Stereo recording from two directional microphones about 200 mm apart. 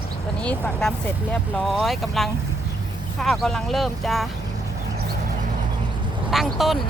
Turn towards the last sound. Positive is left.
turn(degrees=0)  # may be behind; listen again after turning